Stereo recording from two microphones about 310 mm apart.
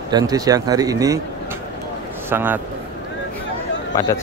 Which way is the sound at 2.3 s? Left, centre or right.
Centre.